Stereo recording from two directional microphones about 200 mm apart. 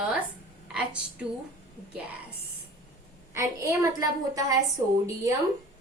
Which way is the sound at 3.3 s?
15° right (ahead or behind).